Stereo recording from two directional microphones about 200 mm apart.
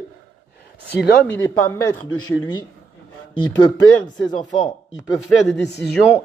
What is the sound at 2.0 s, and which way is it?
Speech, 90° left.